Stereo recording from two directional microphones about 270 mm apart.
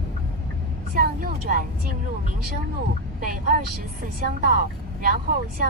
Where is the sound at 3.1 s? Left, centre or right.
Right.